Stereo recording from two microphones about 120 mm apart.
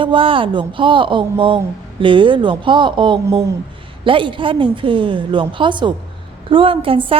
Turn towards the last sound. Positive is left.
turn(degrees=-50)  # may be behind; listen again after turning